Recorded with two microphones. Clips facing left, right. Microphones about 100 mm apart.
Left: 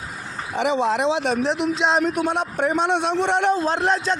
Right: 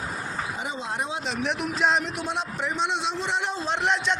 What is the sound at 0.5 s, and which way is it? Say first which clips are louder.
Speech: left 11 dB; 80° left.